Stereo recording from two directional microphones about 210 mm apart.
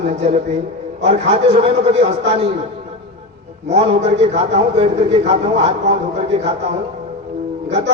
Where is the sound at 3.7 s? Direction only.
30° right (ahead or behind).